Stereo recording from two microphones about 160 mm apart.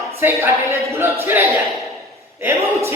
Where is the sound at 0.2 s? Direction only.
15° right (ahead or behind).